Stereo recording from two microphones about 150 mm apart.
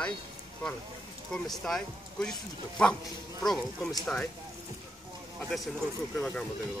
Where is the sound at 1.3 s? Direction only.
5° left (ahead or behind).